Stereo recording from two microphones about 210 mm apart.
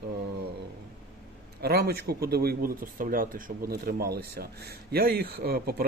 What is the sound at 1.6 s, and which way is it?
Speech, 45° right (ahead or behind).